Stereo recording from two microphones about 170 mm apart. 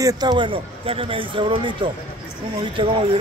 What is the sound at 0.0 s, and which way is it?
Speech, 25° right (ahead or behind).